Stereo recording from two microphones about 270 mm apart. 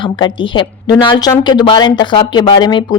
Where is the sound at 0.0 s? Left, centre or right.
Centre.